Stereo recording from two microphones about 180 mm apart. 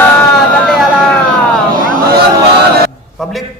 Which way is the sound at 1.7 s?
50° right (ahead or behind).